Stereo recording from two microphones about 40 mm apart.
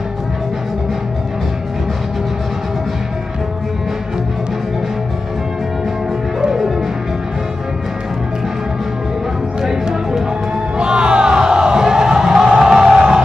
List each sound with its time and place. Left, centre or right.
9.6 s music: centre